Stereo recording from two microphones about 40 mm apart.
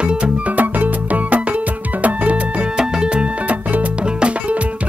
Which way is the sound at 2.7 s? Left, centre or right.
Right.